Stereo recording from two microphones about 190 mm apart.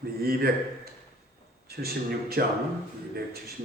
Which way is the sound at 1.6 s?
55° right (ahead or behind).